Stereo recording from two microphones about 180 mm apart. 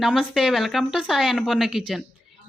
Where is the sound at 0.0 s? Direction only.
Centre (ahead or behind).